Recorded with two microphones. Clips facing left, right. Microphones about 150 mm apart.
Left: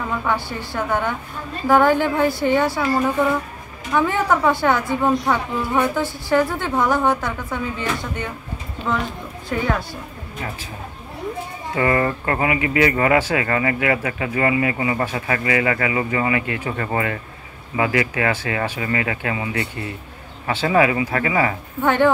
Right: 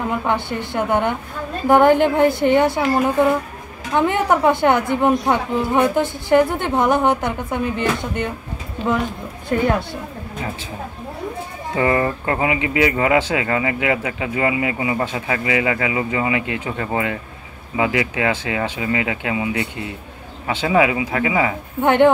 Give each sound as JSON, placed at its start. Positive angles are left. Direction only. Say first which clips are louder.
{"t": 0.1, "sound": "speech", "louder": "right 2 dB", "side_deg": -20}
{"t": 11.7, "sound": "speech", "louder": "right 1 dB", "side_deg": -20}